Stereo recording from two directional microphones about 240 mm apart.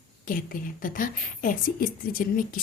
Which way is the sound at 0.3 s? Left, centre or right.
Left.